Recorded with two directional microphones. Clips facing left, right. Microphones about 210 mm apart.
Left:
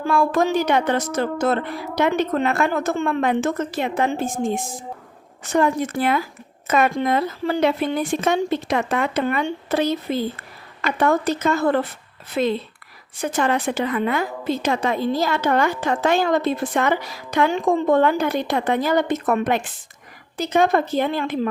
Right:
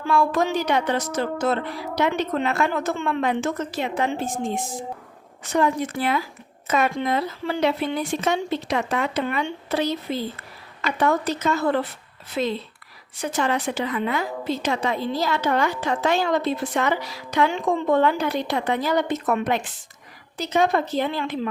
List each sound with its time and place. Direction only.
0.0 s a woman's voice: 50° left (ahead or behind)